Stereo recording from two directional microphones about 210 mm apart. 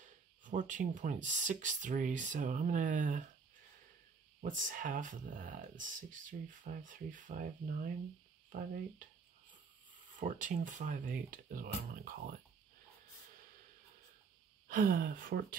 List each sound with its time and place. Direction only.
0.0 s speech: 40° right (ahead or behind)
4.4 s speech: 40° right (ahead or behind)
8.5 s a sound: 40° right (ahead or behind)
10.1 s speech: 40° right (ahead or behind)
14.7 s speech: 40° right (ahead or behind)